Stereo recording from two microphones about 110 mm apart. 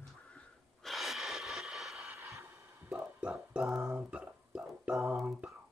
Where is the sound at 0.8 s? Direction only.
Centre (ahead or behind).